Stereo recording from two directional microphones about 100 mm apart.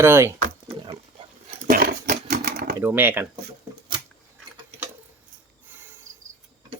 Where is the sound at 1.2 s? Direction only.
65° right (ahead or behind).